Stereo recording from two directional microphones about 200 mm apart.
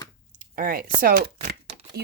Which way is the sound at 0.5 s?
45° right (ahead or behind).